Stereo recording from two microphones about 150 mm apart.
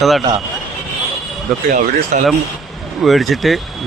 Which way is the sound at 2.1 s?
55° right (ahead or behind).